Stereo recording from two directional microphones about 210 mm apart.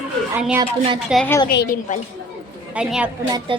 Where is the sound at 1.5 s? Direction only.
50° left (ahead or behind).